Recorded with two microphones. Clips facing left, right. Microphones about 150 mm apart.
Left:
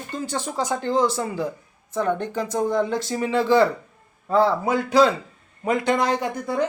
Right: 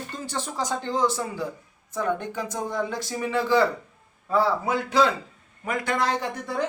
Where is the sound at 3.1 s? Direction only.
20° left (ahead or behind).